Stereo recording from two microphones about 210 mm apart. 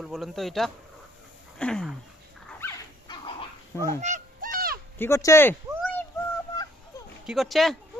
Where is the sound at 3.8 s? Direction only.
15° left (ahead or behind).